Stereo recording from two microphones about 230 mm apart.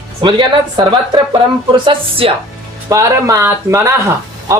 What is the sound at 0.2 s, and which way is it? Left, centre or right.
A woman's voice, centre.